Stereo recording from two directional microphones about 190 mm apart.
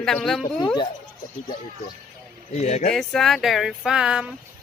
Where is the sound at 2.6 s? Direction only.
35° left (ahead or behind).